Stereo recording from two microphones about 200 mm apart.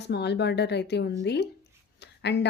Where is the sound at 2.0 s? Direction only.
60° left (ahead or behind).